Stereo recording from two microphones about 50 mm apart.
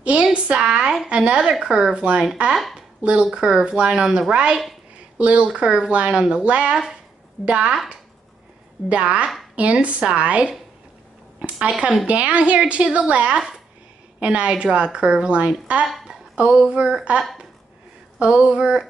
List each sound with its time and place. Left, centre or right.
0.0 s a woman's voice: right
8.8 s a woman's voice: right
11.6 s a woman's voice: right
18.2 s a woman's voice: right